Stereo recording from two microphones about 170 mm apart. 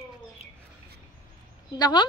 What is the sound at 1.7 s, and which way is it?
Speech, 25° left (ahead or behind).